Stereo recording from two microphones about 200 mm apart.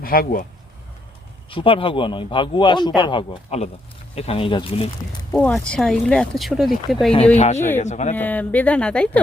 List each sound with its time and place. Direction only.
0.0 s speech: 45° left (ahead or behind)
1.5 s speech: 25° left (ahead or behind)
5.3 s speech: 5° left (ahead or behind)
7.3 s speech: 35° left (ahead or behind)
8.1 s speech: 10° left (ahead or behind)